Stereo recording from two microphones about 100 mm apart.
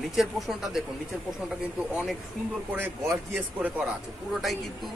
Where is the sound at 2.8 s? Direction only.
20° right (ahead or behind).